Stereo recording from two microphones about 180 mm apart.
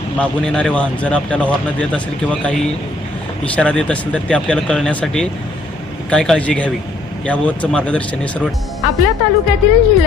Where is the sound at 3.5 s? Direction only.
5° left (ahead or behind).